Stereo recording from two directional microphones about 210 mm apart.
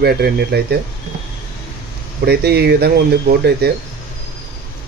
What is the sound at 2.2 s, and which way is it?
Speech, 50° right (ahead or behind).